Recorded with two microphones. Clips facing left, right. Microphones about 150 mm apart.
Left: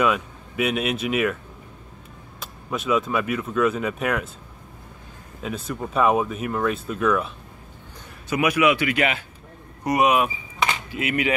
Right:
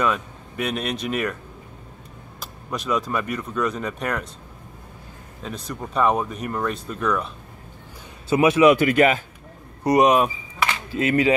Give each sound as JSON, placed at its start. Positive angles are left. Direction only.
{"t": 0.0, "sound": "speech", "side_deg": 5}
{"t": 2.4, "sound": "speech", "side_deg": 5}
{"t": 5.4, "sound": "speech", "side_deg": 5}
{"t": 8.3, "sound": "a man's voice", "side_deg": -30}
{"t": 8.7, "sound": "speech", "side_deg": -45}
{"t": 10.6, "sound": "a sound", "side_deg": 15}
{"t": 11.0, "sound": "speech", "side_deg": -35}